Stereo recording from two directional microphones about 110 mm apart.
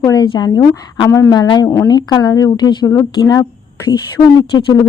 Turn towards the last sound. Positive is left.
turn(degrees=35)  # may be behind; listen again after turning